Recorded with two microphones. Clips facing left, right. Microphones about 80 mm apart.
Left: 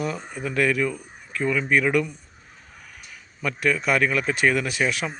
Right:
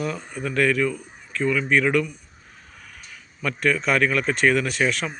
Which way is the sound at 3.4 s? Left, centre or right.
Centre.